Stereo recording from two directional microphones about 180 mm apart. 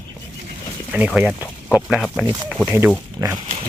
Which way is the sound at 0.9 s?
10° right (ahead or behind).